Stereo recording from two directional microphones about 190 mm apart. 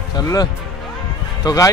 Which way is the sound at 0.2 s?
20° left (ahead or behind).